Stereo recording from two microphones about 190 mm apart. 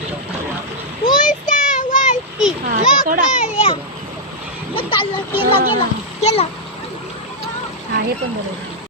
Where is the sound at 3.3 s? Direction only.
40° left (ahead or behind).